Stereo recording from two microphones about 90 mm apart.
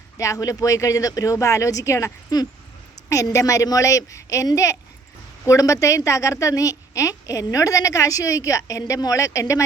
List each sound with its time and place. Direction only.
0.2 s a woman's voice: 40° left (ahead or behind)